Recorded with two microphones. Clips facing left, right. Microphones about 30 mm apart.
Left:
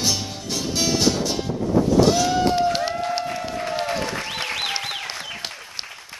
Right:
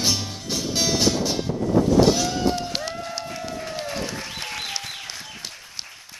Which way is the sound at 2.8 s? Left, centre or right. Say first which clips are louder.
Left 6 dB; left.